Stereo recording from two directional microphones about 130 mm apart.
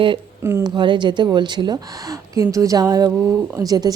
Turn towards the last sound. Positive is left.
turn(degrees=-30)  # may be behind; listen again after turning